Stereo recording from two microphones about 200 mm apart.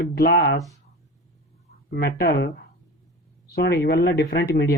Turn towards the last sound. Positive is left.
turn(degrees=55)  # may be behind; listen again after turning